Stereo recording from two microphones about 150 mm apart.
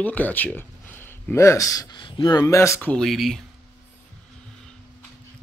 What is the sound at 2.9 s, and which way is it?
Speech, 5° left (ahead or behind).